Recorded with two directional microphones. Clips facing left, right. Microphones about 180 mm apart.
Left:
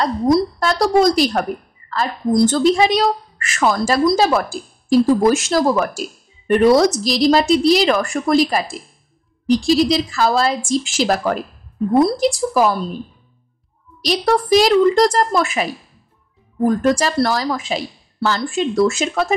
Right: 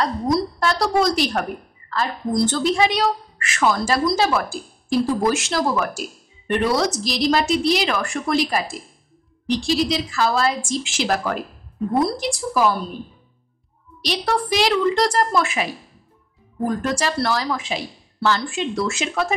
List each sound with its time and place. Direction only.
0.3 s a woman's voice: 40° left (ahead or behind)
14.0 s a woman's voice: 40° left (ahead or behind)